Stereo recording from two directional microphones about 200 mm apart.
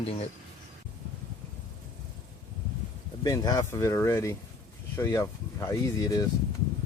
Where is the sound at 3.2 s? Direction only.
20° left (ahead or behind).